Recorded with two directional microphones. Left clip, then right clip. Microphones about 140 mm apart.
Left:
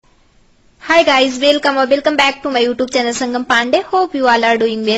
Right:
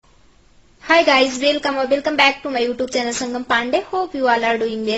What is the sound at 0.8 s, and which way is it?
A child's voice, 25° left (ahead or behind).